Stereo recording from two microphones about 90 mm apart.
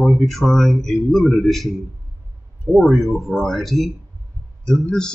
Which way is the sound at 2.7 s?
Centre (ahead or behind).